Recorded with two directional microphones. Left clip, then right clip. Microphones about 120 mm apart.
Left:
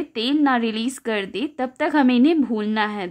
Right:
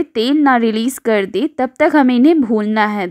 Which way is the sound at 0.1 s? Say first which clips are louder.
Right 6 dB; 45° right (ahead or behind).